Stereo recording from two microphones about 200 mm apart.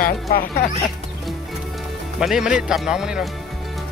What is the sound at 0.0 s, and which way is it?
Speech, 50° left (ahead or behind).